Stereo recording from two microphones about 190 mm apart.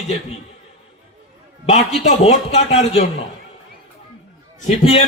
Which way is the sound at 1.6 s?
35° left (ahead or behind).